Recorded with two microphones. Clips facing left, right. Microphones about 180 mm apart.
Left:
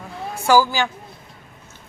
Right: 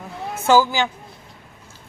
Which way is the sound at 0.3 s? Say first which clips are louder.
Even; 20° right (ahead or behind).